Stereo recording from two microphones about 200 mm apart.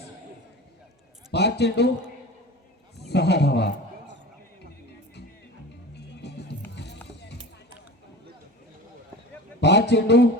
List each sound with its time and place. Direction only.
1.3 s a man's voice: 55° left (ahead or behind)
3.0 s a sound: 55° left (ahead or behind)
6.2 s music: 55° left (ahead or behind)
9.6 s a man's voice: 55° left (ahead or behind)